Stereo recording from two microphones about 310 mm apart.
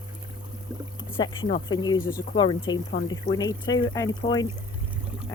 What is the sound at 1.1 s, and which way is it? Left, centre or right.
Speech, centre.